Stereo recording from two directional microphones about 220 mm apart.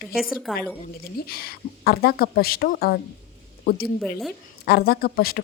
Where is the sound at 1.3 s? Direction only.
45° left (ahead or behind).